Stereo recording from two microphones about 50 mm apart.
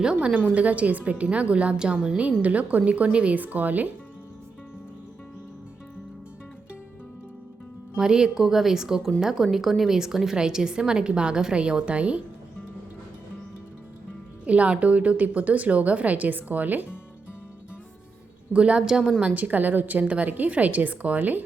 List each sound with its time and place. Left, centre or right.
0.0 s a woman's voice: centre; by 3.9 s right
7.9 s a woman's voice: centre
14.4 s a woman's voice: right
18.5 s a woman's voice: right
19.2 s a woman's voice: right